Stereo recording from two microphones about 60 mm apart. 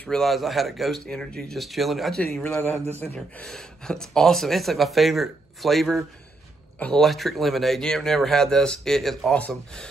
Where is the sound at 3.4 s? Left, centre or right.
Centre.